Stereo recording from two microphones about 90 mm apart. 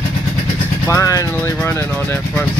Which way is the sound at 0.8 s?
35° left (ahead or behind).